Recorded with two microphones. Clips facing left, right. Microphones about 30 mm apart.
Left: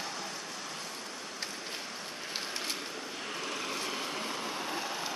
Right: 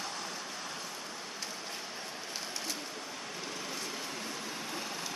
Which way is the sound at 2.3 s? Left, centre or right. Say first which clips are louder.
Left 4 dB; left.